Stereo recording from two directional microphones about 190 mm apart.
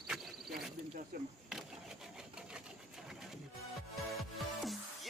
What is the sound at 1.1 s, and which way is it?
Speech, 50° right (ahead or behind).